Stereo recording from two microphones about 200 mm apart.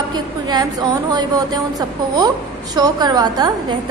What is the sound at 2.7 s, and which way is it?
A woman's voice, 20° right (ahead or behind).